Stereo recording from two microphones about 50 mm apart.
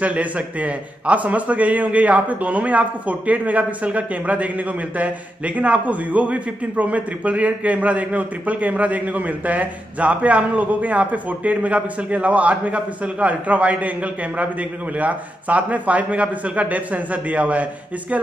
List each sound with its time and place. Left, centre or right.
0.0 s a man's voice: right